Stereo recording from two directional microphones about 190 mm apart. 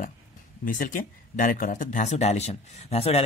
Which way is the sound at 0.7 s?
45° left (ahead or behind).